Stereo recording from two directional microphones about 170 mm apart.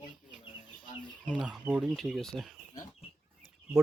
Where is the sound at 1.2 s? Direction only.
5° left (ahead or behind).